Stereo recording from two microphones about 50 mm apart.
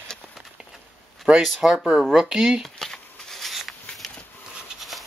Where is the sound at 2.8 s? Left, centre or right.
Centre.